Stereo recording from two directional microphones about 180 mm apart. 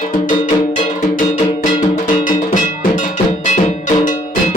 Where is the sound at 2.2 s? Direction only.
45° left (ahead or behind).